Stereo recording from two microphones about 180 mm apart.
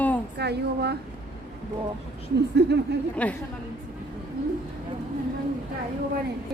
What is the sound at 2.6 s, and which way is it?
Speech, 70° right (ahead or behind).